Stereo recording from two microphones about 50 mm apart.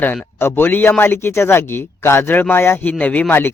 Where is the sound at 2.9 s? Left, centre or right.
Left.